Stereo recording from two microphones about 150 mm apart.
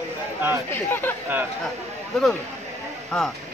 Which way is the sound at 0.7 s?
15° left (ahead or behind).